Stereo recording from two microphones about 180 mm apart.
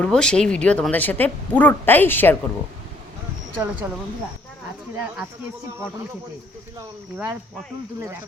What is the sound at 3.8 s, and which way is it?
Speech, 15° right (ahead or behind).